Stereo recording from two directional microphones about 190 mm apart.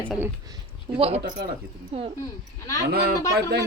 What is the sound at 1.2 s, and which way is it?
Speech, 60° right (ahead or behind).